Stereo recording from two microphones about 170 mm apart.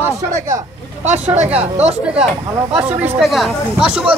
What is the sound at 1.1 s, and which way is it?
Speech, 45° right (ahead or behind).